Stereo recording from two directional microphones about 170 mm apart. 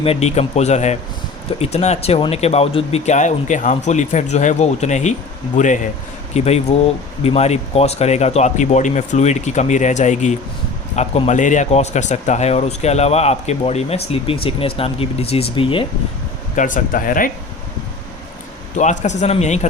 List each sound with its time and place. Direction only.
0.0 s speech: 40° left (ahead or behind)
16.6 s speech: 50° left (ahead or behind)
18.8 s speech: 45° left (ahead or behind)